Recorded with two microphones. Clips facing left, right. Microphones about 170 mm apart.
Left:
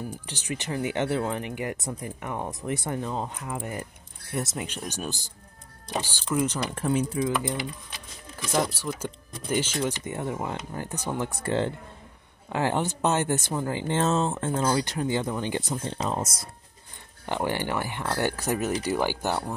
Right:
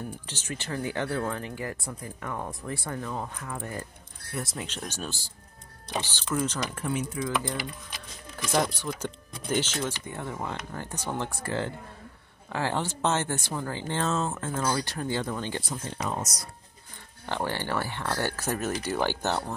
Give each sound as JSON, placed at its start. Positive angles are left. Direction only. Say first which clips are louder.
{"t": 0.3, "sound": "speech", "louder": "left 4 dB", "side_deg": 15}
{"t": 4.6, "sound": "speech", "louder": "left 2 dB", "side_deg": 10}
{"t": 6.7, "sound": "speech", "louder": "left 5 dB", "side_deg": 30}
{"t": 8.5, "sound": "speech", "louder": "even", "side_deg": 5}
{"t": 11.4, "sound": "speech", "louder": "left 5 dB", "side_deg": 25}
{"t": 17.3, "sound": "speech", "louder": "left 2 dB", "side_deg": 15}